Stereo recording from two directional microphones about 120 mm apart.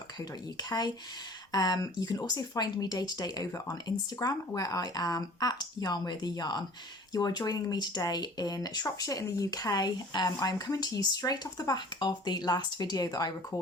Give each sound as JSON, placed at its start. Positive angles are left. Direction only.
{"t": 0.5, "sound": "speech", "side_deg": 35}